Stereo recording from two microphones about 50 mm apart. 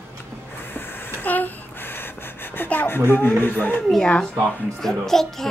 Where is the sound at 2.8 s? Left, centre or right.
Left.